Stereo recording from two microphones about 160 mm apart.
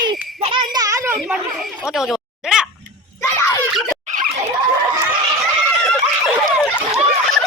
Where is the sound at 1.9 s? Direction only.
5° right (ahead or behind).